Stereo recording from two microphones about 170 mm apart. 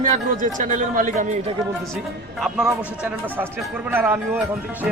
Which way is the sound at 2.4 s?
5° right (ahead or behind).